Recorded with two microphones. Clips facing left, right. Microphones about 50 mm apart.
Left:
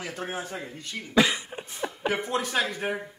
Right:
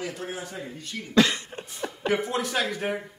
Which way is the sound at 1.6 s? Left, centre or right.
Centre.